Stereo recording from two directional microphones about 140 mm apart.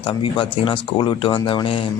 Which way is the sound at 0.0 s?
35° left (ahead or behind).